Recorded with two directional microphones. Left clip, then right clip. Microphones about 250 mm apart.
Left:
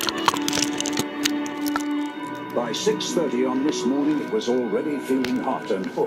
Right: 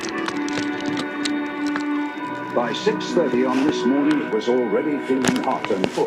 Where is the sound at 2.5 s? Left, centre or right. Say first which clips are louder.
Right 2 dB; centre.